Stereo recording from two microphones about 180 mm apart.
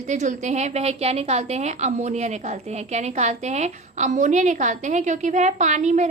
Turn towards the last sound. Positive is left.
turn(degrees=-40)  # may be behind; listen again after turning